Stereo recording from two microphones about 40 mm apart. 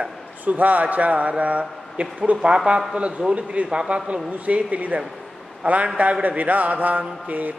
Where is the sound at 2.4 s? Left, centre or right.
Right.